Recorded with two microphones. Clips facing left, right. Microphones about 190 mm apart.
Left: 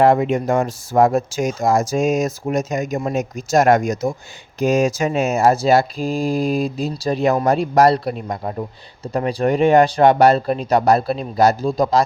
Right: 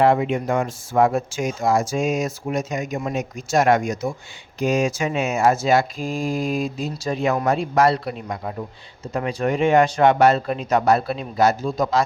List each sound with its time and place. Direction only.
0.0 s speech: 45° left (ahead or behind)